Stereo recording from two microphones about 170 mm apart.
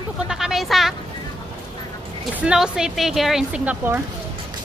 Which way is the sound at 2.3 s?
5° right (ahead or behind).